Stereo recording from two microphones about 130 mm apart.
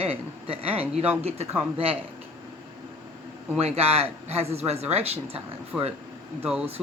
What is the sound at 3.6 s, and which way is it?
Speech, 55° right (ahead or behind).